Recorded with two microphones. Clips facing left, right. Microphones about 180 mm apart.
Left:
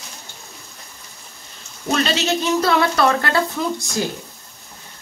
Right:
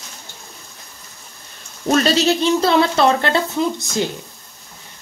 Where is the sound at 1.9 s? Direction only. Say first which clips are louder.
Right 4 dB; 40° right (ahead or behind); by 4.0 s 20° right (ahead or behind).